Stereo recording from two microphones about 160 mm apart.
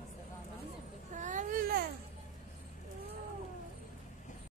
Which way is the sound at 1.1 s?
50° right (ahead or behind).